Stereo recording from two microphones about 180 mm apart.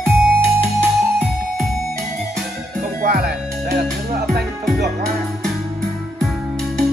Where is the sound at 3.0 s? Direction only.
60° right (ahead or behind).